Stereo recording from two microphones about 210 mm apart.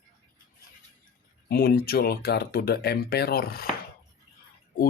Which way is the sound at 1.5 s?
50° left (ahead or behind).